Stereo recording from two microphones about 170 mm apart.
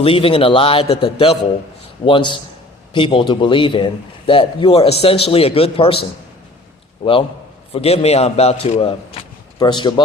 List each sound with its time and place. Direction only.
0.0 s a man's voice: 35° left (ahead or behind)